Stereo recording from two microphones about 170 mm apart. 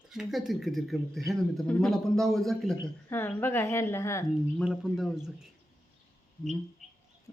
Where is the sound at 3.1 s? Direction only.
15° left (ahead or behind).